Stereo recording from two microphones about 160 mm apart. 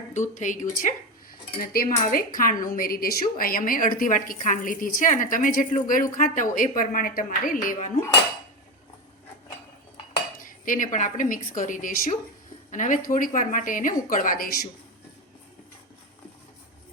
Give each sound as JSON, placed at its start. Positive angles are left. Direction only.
{"t": 0.1, "sound": "a woman's voice", "side_deg": 50}
{"t": 1.6, "sound": "a woman's voice", "side_deg": 65}
{"t": 10.4, "sound": "a woman's voice", "side_deg": 55}